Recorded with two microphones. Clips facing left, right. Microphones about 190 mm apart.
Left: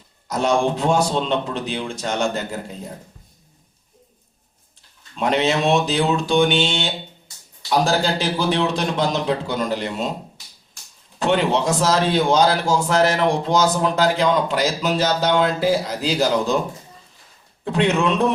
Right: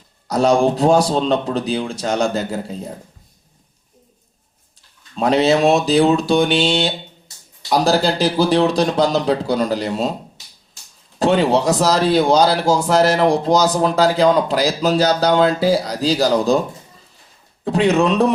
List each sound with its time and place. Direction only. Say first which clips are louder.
0.3 s speech: right 5 dB; 35° right (ahead or behind)
5.1 s speech: right 5 dB; 35° right (ahead or behind)
11.2 s speech: right 4 dB; 35° right (ahead or behind)
17.8 s speech: right 4 dB; 35° right (ahead or behind)